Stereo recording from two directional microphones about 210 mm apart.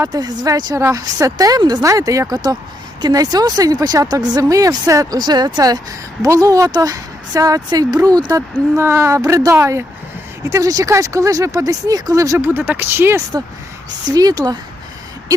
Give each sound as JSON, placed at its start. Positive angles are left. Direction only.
{"t": 0.0, "sound": "speech", "side_deg": -20}